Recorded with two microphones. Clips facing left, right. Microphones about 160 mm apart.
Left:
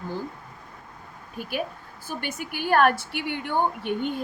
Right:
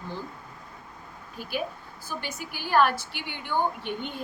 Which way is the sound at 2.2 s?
55° left (ahead or behind).